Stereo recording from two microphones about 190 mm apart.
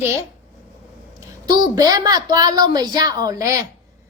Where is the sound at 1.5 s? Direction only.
20° right (ahead or behind).